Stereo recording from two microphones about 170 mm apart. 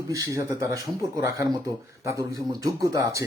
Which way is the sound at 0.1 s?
20° right (ahead or behind).